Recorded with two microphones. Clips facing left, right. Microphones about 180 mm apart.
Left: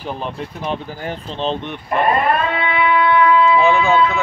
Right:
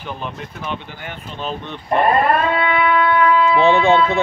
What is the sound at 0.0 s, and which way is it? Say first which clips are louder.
Speech: left 3 dB; 35° left (ahead or behind).